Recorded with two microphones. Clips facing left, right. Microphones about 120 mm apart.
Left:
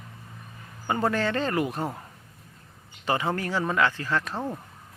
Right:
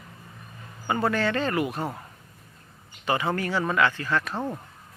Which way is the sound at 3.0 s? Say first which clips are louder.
Right 1 dB; 30° left (ahead or behind).